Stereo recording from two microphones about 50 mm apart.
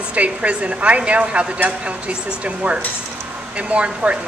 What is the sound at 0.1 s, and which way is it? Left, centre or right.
Speech, right.